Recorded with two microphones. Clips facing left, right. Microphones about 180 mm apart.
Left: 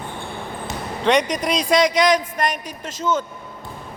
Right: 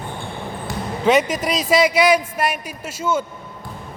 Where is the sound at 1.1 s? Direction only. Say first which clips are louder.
Right 1 dB; 5° right (ahead or behind).